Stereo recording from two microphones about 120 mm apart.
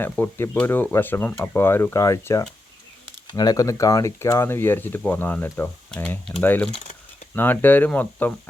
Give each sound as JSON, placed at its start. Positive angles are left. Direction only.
{"t": 0.0, "sound": "speech", "side_deg": 20}